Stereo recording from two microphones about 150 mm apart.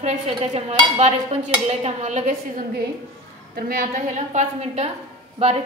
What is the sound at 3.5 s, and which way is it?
Speech, 85° right.